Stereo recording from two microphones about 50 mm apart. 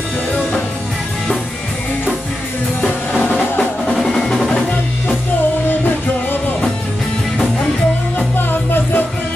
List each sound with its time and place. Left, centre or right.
3.2 s music: left
3.8 s percussion: centre
4.1 s music: centre
8.4 s music: left